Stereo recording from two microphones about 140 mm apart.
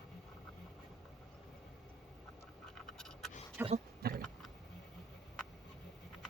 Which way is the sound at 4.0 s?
90° right.